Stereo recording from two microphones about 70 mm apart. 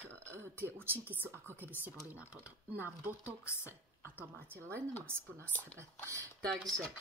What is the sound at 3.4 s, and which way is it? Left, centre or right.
Speech, left.